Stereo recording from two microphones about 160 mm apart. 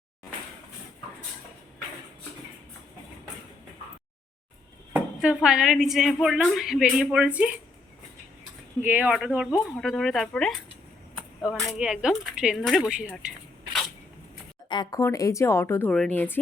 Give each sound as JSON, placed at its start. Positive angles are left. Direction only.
{"t": 4.9, "sound": "a woman's voice", "side_deg": -5}
{"t": 8.8, "sound": "a woman's voice", "side_deg": -10}
{"t": 14.7, "sound": "speech", "side_deg": 25}